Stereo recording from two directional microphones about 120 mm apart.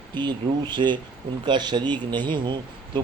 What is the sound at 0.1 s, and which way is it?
Speech, 40° right (ahead or behind).